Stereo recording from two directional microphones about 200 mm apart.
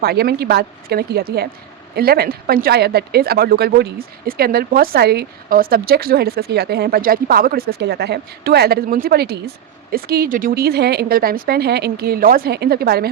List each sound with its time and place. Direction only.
0.0 s speech: 50° right (ahead or behind)